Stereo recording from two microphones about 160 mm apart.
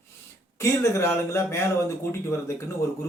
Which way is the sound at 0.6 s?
15° left (ahead or behind).